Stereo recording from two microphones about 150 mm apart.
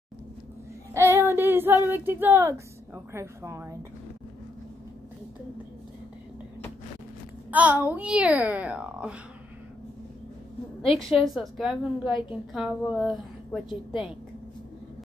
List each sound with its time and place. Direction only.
0.9 s child singing: 15° right (ahead or behind)
1.9 s a woman's voice: 15° right (ahead or behind)
7.5 s a woman's voice: 10° right (ahead or behind)
10.8 s a woman's voice: 35° left (ahead or behind)
11.1 s a woman's voice: centre (ahead or behind)